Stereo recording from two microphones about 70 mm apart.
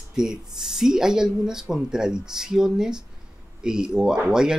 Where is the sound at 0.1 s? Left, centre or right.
Centre.